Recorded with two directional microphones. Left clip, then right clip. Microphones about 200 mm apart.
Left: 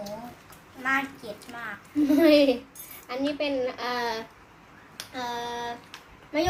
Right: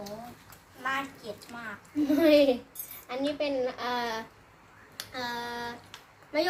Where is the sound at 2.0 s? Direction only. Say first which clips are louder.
Left 3 dB; 5° right (ahead or behind).